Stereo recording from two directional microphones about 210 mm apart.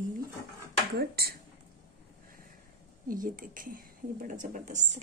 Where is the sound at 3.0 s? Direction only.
40° right (ahead or behind).